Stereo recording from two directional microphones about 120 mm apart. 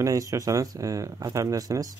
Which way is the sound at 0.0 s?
25° right (ahead or behind).